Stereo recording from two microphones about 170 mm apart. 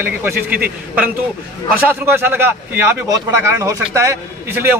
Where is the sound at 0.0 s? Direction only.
10° right (ahead or behind).